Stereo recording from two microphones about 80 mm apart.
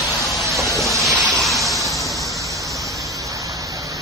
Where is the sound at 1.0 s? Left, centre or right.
Centre.